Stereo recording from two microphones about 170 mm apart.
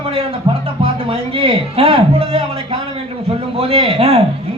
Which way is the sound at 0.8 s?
35° right (ahead or behind).